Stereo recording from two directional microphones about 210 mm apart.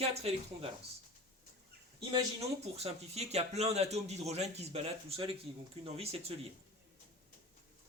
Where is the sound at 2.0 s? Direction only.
20° right (ahead or behind).